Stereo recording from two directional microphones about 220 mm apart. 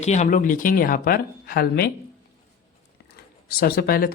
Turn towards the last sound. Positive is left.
turn(degrees=45)  # may be behind; listen again after turning